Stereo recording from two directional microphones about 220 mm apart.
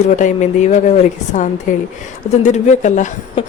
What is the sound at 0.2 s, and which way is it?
Speech, 35° left (ahead or behind).